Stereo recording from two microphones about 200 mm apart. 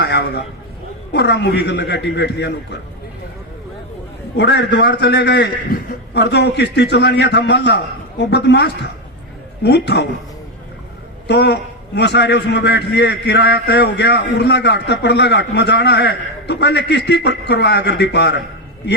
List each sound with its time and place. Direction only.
0.0 s a man's voice: 55° left (ahead or behind)
4.4 s a man's voice: 60° left (ahead or behind)
11.3 s a man's voice: 55° left (ahead or behind)